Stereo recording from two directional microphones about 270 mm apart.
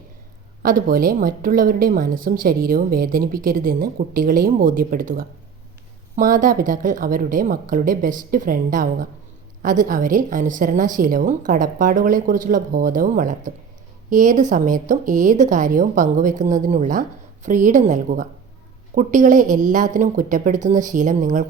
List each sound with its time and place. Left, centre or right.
0.6 s a woman's voice: right